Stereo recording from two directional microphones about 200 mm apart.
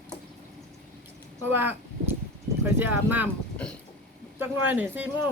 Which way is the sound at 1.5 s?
10° right (ahead or behind).